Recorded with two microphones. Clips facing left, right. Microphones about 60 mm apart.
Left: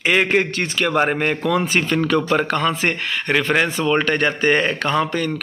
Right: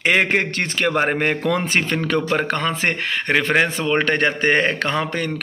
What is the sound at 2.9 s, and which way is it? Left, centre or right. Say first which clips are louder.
Speech: even; right.